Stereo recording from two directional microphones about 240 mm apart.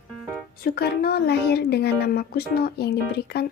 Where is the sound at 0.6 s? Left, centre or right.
Left.